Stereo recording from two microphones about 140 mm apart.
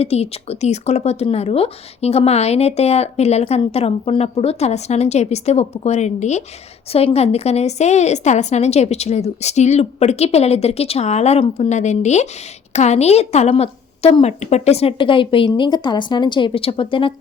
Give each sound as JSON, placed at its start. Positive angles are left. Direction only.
{"t": 0.0, "sound": "a woman's voice", "side_deg": 45}